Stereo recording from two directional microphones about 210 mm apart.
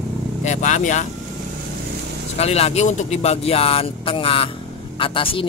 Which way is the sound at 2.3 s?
30° left (ahead or behind).